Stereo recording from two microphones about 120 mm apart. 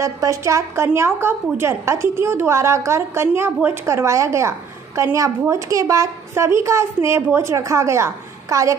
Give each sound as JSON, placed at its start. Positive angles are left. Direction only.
{"t": 0.0, "sound": "a woman's voice", "side_deg": -25}